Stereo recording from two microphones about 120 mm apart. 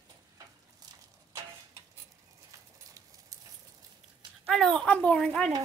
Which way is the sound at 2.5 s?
30° right (ahead or behind).